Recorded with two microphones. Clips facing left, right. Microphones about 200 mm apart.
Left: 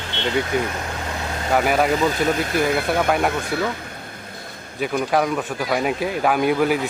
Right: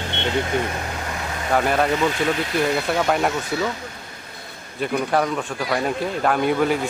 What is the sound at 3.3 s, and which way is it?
Speech, 55° left (ahead or behind).